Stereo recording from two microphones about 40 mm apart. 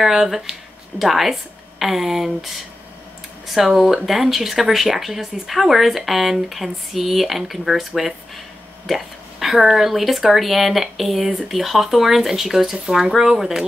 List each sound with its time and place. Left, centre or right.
0.0 s speech: centre
12.8 s speech: centre